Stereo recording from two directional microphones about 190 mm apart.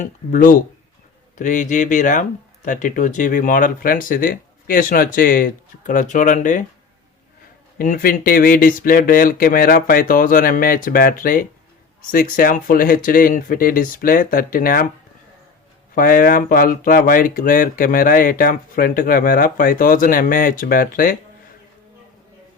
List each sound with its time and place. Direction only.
0.0 s speech: 45° left (ahead or behind)
7.8 s speech: 50° left (ahead or behind)
16.0 s speech: 50° left (ahead or behind)